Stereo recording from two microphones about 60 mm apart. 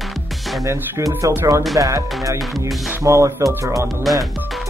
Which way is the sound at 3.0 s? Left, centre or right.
Right.